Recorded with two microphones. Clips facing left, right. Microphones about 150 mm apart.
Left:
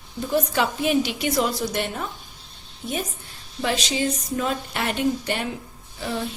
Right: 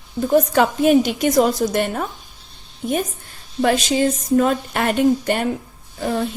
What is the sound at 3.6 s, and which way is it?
A woman's voice, 50° right (ahead or behind).